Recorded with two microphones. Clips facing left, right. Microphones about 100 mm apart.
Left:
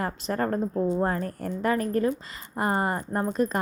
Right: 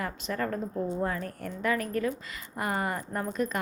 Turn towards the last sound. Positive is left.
turn(degrees=35)  # may be behind; listen again after turning